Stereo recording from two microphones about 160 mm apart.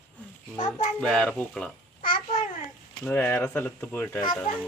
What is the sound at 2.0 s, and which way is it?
Babbling, 60° left (ahead or behind).